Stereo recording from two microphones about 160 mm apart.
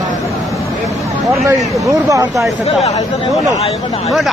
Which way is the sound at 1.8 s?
20° right (ahead or behind).